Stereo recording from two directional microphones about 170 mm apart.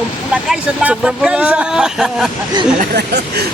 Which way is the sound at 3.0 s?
75° right (ahead or behind).